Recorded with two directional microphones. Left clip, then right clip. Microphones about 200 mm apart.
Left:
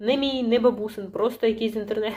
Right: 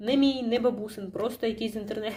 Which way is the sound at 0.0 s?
10° right (ahead or behind).